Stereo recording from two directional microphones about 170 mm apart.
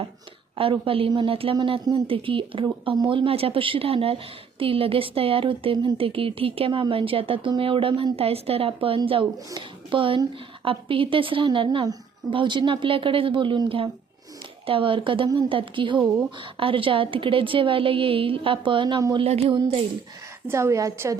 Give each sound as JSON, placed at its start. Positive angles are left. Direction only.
{"t": 0.5, "sound": "speech", "side_deg": -30}
{"t": 20.5, "sound": "a woman's voice", "side_deg": -15}